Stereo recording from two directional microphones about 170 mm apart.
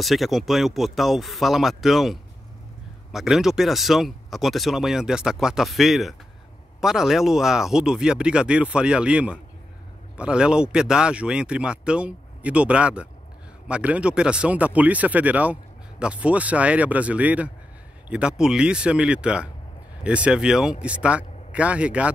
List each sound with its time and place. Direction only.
0.0 s speech: centre (ahead or behind)